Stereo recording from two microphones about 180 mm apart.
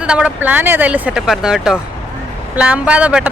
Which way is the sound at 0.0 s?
5° right (ahead or behind).